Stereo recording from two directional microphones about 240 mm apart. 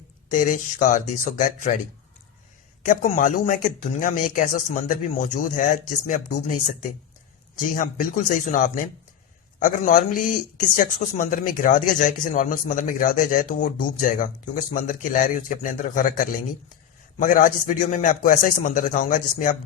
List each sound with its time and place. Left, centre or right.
0.3 s speech: left
2.8 s speech: left
7.6 s speech: left